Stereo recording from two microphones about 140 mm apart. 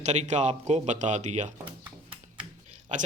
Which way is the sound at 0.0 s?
55° right (ahead or behind).